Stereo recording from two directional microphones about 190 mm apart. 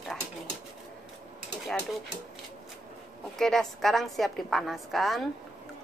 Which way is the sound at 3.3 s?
Centre (ahead or behind).